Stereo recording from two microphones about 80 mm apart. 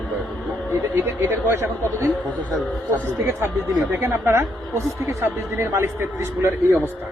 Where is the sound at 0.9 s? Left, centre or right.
Right.